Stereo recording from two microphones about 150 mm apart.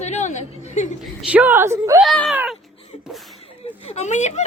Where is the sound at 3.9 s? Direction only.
50° left (ahead or behind).